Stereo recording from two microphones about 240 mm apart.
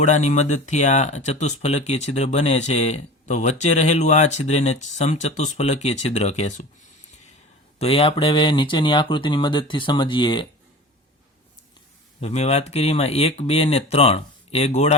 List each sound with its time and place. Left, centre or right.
0.0 s speech: left
7.8 s speech: left
12.2 s speech: left